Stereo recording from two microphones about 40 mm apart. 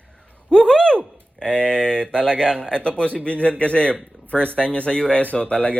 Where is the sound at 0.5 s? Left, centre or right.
Left.